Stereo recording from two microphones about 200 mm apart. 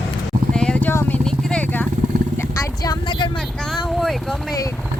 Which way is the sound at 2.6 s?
20° left (ahead or behind).